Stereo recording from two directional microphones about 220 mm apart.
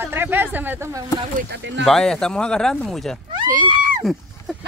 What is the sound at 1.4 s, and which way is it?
Speech, 50° right (ahead or behind).